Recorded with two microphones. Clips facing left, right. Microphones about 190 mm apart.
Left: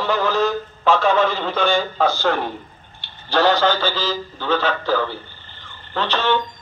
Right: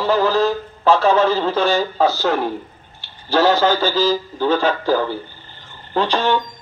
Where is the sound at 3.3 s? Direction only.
10° right (ahead or behind).